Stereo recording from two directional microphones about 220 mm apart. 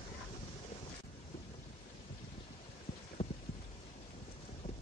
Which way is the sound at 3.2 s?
25° left (ahead or behind).